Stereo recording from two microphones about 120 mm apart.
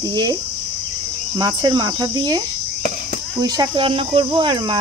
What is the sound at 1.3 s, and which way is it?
Speech, 35° right (ahead or behind).